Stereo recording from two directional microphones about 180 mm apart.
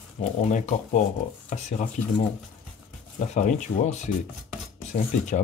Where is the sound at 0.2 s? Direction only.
40° left (ahead or behind).